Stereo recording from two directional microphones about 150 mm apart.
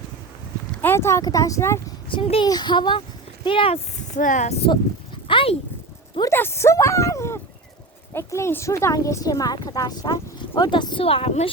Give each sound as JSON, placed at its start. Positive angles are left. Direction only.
{"t": 0.8, "sound": "speech", "side_deg": 15}
{"t": 2.0, "sound": "speech", "side_deg": 35}
{"t": 4.1, "sound": "speech", "side_deg": 55}
{"t": 5.3, "sound": "speech", "side_deg": 35}
{"t": 6.3, "sound": "speech", "side_deg": 15}